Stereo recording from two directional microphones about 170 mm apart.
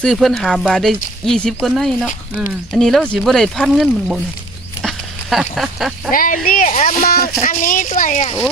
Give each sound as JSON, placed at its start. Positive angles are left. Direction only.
{"t": 0.0, "sound": "speech", "side_deg": 0}
{"t": 4.8, "sound": "duck", "side_deg": 0}
{"t": 6.1, "sound": "speech", "side_deg": 55}